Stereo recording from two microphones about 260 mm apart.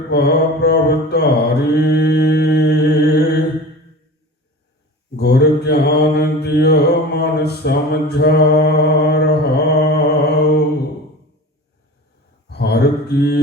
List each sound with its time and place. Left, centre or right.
0.1 s mantra: left
5.1 s mantra: left
12.5 s mantra: left